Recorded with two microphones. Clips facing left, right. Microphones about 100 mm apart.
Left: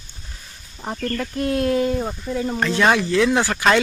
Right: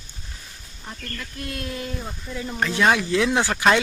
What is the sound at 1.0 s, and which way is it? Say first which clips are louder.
Speech: left 12 dB; 50° left (ahead or behind).